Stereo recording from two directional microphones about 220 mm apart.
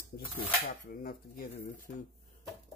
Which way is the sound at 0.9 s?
40° left (ahead or behind).